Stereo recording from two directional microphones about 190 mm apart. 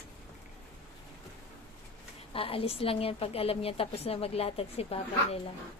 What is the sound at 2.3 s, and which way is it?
A woman's voice, 30° left (ahead or behind).